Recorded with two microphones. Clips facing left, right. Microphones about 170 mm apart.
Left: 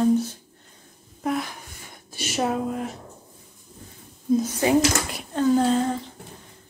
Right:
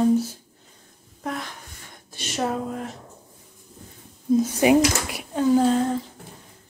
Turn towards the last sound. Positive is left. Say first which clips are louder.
# right 1 dB
turn(degrees=0)  # may be behind; listen again after turning